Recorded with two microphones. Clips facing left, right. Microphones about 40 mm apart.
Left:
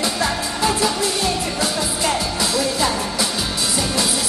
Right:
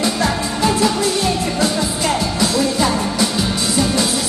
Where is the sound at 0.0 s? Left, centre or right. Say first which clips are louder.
Right 3 dB; centre.